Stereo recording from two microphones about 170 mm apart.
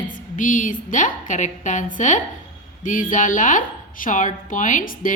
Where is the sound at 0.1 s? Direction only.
50° left (ahead or behind).